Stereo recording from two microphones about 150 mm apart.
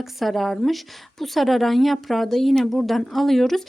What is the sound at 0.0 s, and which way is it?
Speech, centre (ahead or behind).